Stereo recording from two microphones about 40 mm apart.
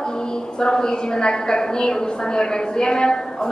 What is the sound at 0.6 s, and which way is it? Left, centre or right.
A woman's voice, centre.